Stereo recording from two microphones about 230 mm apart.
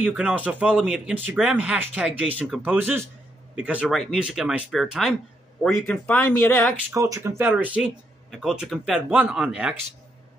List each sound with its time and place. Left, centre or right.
0.0 s speech: centre
6.9 s speech: centre